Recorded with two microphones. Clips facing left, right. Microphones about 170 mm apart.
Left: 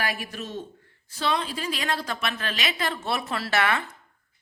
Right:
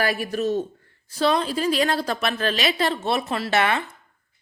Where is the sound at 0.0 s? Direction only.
40° right (ahead or behind); by 3.8 s 20° right (ahead or behind).